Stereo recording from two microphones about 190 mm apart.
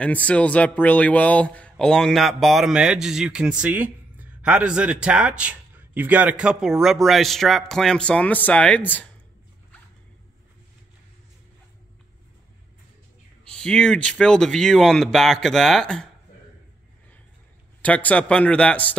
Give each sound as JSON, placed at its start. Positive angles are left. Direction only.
{"t": 0.0, "sound": "speech", "side_deg": 5}
{"t": 13.4, "sound": "speech", "side_deg": 5}
{"t": 17.8, "sound": "speech", "side_deg": 5}